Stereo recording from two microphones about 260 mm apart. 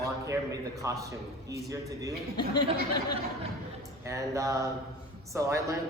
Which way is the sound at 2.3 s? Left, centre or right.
Centre.